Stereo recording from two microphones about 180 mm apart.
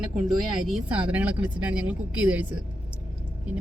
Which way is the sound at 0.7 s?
10° right (ahead or behind).